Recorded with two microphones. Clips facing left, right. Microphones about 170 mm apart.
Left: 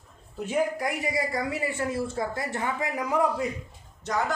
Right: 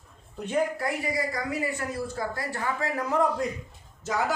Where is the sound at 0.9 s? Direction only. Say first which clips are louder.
Left 1 dB; 25° left (ahead or behind); by 3.4 s 10° left (ahead or behind).